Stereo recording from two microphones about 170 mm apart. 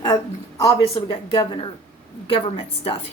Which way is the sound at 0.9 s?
25° left (ahead or behind).